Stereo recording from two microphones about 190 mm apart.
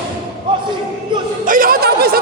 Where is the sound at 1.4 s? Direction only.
45° right (ahead or behind).